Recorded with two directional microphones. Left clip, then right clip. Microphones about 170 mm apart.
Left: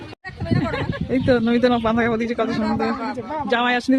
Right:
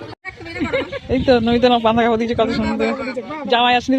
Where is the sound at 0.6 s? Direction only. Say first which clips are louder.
Right 6 dB; 20° left (ahead or behind).